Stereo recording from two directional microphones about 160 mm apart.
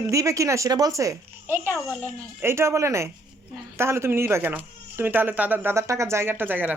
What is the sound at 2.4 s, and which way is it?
Speech, 15° right (ahead or behind).